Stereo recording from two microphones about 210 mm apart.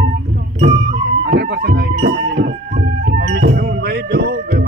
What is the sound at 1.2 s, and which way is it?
Music, 50° right (ahead or behind).